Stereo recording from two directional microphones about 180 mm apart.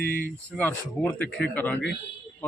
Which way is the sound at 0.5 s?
10° left (ahead or behind).